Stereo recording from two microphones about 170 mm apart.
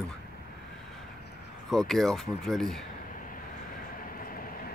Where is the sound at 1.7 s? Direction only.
Centre (ahead or behind).